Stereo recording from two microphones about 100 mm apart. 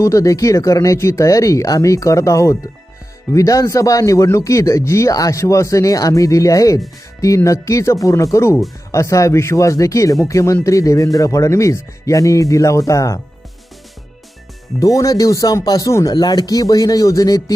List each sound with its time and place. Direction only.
0.0 s speech: 35° left (ahead or behind)
14.8 s speech: 35° left (ahead or behind)
16.1 s speech: 45° left (ahead or behind)